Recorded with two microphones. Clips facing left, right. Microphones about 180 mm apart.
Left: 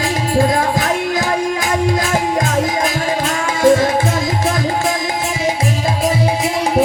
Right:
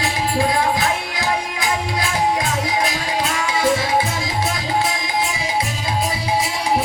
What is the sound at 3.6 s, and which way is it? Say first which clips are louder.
Music: left 9 dB; 45° left (ahead or behind).